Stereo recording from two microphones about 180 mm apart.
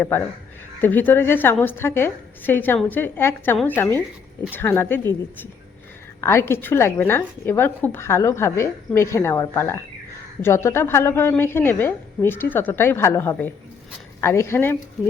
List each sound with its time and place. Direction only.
0.8 s a woman's voice: 10° left (ahead or behind)
6.2 s a woman's voice: 15° left (ahead or behind)